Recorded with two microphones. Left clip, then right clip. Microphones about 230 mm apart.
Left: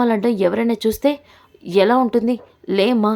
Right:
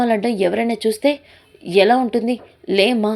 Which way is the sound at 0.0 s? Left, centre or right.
Centre.